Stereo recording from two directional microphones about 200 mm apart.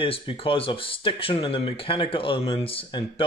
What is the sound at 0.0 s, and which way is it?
Speech, 25° left (ahead or behind).